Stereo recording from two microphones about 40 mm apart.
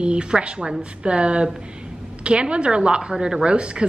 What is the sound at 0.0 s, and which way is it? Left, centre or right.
A woman's voice, right.